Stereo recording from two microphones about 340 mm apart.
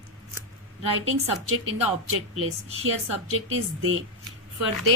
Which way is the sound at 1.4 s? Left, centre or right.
Right.